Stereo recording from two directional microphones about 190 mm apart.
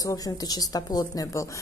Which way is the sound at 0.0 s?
20° left (ahead or behind).